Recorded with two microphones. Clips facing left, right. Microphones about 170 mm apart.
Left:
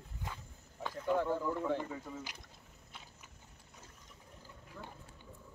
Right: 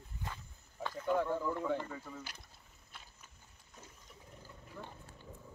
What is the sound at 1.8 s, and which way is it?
Speech, 15° left (ahead or behind).